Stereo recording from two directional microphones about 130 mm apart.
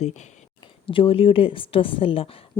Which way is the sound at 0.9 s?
45° left (ahead or behind).